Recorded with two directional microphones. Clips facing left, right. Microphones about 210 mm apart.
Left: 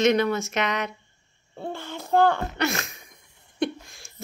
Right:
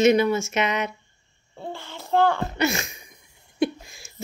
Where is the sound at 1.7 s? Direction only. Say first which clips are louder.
Left 1 dB; 50° left (ahead or behind).